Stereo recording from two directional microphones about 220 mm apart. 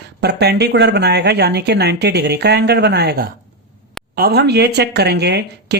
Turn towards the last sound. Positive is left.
turn(degrees=-50)  # may be behind; listen again after turning